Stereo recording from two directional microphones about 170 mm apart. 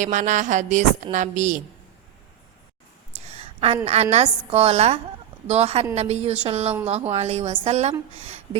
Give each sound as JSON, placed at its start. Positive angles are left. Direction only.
{"t": 0.0, "sound": "speech", "side_deg": -45}
{"t": 3.2, "sound": "a sound", "side_deg": -35}
{"t": 3.8, "sound": "a woman's voice", "side_deg": -40}